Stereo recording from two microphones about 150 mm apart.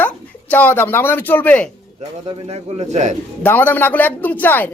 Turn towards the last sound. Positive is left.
turn(degrees=10)  # may be behind; listen again after turning